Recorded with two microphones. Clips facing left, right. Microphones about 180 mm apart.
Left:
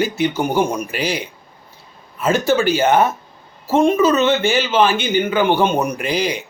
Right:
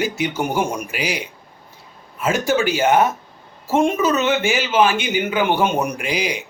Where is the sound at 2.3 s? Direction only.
35° left (ahead or behind).